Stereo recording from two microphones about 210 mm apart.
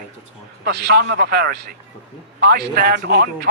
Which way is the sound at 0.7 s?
50° right (ahead or behind).